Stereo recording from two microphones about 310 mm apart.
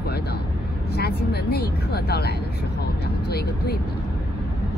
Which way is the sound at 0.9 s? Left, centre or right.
Left.